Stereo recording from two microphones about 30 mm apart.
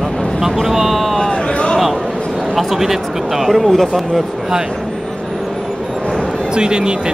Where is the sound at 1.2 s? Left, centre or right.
Left.